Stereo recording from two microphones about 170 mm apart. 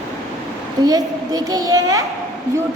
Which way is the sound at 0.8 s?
20° right (ahead or behind).